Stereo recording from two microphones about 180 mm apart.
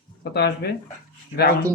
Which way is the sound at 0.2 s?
65° left (ahead or behind).